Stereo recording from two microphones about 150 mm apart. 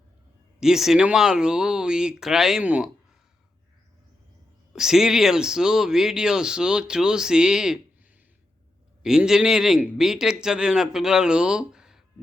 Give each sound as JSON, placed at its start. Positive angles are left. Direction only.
{"t": 0.6, "sound": "speech", "side_deg": -5}
{"t": 4.7, "sound": "speech", "side_deg": -5}
{"t": 9.0, "sound": "speech", "side_deg": -5}